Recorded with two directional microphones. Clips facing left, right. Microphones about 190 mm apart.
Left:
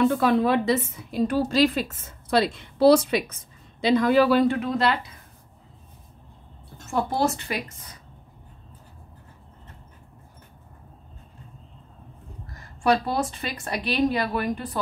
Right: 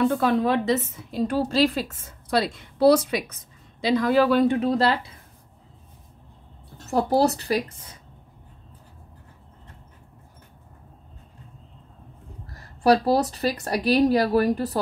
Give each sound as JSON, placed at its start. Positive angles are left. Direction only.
{"t": 0.0, "sound": "a woman's voice", "side_deg": 10}
{"t": 4.6, "sound": "a woman's voice", "side_deg": -35}
{"t": 6.8, "sound": "a woman's voice", "side_deg": -35}
{"t": 12.5, "sound": "a woman's voice", "side_deg": -35}